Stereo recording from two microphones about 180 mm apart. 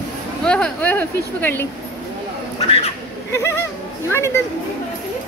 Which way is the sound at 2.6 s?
35° left (ahead or behind).